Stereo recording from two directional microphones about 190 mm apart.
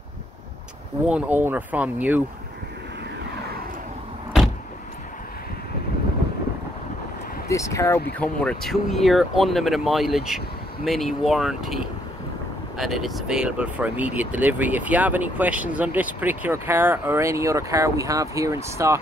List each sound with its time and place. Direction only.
1.0 s speech: 5° right (ahead or behind)
7.4 s speech: 15° left (ahead or behind); by 18.9 s 15° right (ahead or behind)